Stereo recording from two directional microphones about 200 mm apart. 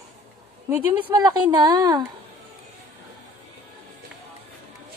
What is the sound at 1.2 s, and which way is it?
Speech, 20° right (ahead or behind).